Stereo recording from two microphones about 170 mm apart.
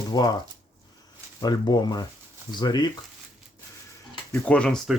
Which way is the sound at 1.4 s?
25° left (ahead or behind).